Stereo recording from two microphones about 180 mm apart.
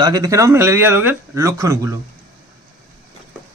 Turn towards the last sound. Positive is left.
turn(degrees=-15)  # may be behind; listen again after turning